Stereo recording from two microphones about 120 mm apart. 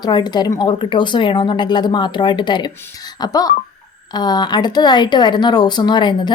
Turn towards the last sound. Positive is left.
turn(degrees=40)  # may be behind; listen again after turning